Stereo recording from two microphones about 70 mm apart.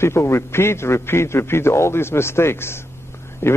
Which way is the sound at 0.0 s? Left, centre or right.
Left.